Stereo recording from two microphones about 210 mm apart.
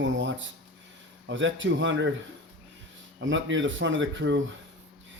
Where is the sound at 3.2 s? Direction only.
60° right (ahead or behind).